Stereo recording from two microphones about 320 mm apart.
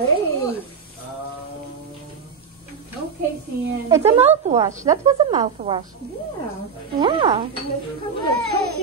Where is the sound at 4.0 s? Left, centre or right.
Centre.